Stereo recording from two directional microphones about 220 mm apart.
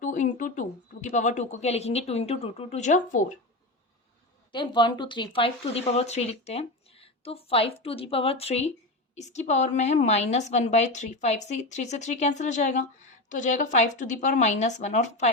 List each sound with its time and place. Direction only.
0.0 s a woman's voice: 35° left (ahead or behind)
4.5 s a woman's voice: 20° left (ahead or behind)